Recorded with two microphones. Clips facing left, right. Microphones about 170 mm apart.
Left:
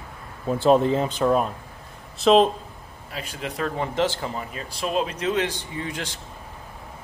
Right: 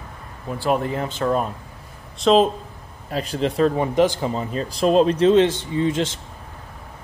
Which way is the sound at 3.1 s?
35° right (ahead or behind).